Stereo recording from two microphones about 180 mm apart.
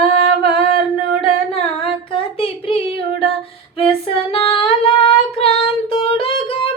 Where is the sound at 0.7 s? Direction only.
30° left (ahead or behind).